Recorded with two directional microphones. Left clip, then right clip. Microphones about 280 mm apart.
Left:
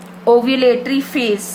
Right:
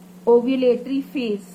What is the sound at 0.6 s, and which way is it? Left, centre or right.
Speech, centre.